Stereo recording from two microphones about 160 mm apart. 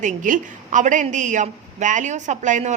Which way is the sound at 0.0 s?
50° right (ahead or behind).